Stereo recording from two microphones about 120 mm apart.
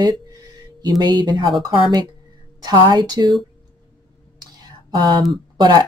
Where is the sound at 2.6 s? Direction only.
35° right (ahead or behind).